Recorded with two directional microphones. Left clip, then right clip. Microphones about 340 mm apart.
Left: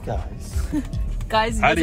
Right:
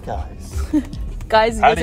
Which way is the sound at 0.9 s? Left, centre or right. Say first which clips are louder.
Right 6 dB; right.